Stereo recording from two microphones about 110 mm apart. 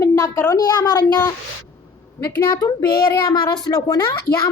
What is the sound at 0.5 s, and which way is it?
Speech, 35° left (ahead or behind).